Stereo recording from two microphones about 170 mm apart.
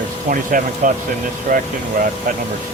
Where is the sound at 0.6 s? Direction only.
55° right (ahead or behind).